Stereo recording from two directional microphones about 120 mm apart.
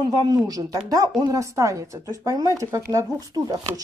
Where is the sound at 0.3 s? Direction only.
30° right (ahead or behind).